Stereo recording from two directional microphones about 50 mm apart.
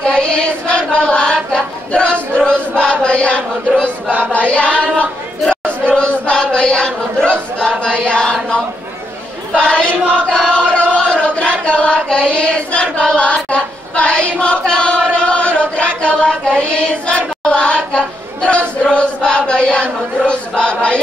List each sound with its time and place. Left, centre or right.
0.0 s choir: centre
9.6 s chant: left
11.6 s child singing: left
14.4 s choir: centre